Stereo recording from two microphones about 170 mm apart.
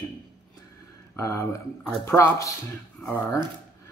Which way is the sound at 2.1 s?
15° left (ahead or behind).